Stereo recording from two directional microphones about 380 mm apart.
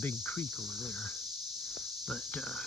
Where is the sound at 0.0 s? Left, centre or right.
Centre.